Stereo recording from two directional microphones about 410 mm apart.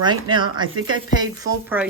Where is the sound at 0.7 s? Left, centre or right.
Right.